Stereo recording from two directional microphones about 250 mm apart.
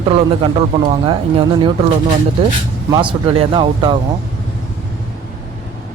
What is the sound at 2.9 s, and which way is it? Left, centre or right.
Speech, centre.